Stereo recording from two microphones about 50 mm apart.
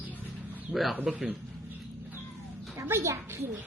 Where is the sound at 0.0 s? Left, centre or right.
Right.